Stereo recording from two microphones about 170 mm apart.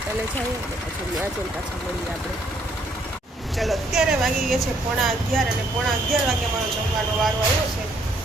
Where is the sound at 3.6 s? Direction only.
Centre (ahead or behind).